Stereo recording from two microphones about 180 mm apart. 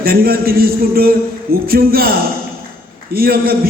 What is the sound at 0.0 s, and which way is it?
A man's voice, 55° right (ahead or behind).